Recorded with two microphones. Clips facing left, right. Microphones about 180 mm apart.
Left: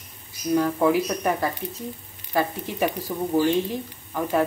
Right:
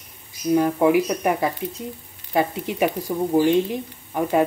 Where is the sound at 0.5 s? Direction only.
15° right (ahead or behind).